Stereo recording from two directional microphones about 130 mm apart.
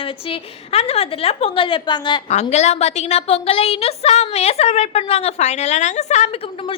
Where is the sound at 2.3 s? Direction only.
60° left (ahead or behind).